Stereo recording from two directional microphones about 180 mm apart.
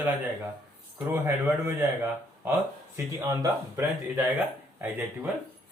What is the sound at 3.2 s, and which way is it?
Speech, 20° right (ahead or behind).